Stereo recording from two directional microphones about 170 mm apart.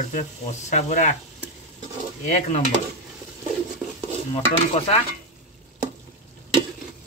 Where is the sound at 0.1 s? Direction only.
45° left (ahead or behind).